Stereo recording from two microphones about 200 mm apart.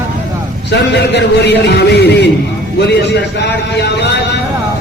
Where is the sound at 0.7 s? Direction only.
60° left (ahead or behind).